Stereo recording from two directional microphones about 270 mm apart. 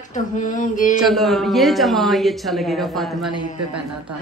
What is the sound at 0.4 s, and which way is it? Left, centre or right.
Speech, left.